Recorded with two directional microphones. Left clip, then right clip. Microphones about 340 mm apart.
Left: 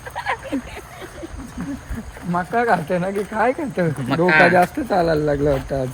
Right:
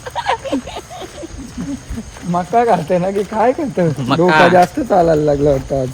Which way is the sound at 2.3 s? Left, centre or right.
Centre.